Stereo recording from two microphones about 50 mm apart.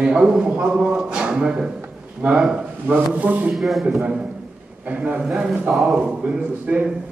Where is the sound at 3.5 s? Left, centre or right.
Centre.